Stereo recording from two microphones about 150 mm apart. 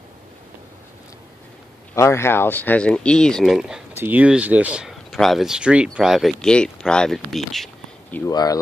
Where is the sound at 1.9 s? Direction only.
15° left (ahead or behind); by 7.7 s centre (ahead or behind).